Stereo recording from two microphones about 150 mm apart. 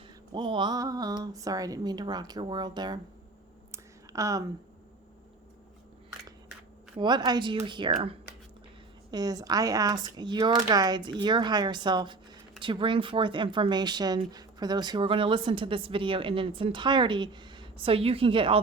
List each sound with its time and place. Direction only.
0.3 s a woman's voice: 35° right (ahead or behind)
3.7 s a sound: 20° right (ahead or behind)
7.0 s speech: 30° right (ahead or behind)
9.0 s speech: 25° right (ahead or behind)